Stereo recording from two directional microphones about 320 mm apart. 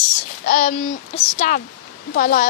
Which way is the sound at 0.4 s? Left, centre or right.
Left.